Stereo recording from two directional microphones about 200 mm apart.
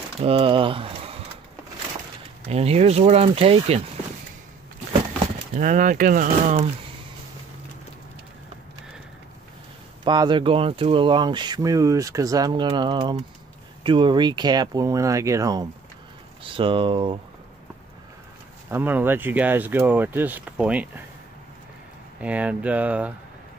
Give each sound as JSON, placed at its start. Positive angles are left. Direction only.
{"t": 0.2, "sound": "speech", "side_deg": -25}
{"t": 2.4, "sound": "speech", "side_deg": -30}
{"t": 5.5, "sound": "speech", "side_deg": -40}
{"t": 10.0, "sound": "speech", "side_deg": -20}
{"t": 18.7, "sound": "speech", "side_deg": -10}
{"t": 22.2, "sound": "speech", "side_deg": -5}